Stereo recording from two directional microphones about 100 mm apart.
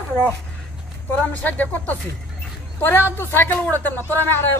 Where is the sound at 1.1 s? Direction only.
15° left (ahead or behind).